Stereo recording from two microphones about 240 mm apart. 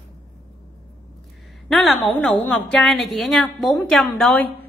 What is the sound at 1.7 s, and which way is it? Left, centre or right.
A woman's voice, centre.